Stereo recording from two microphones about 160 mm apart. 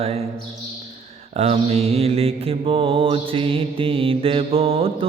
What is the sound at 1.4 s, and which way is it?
Mantra, 40° right (ahead or behind).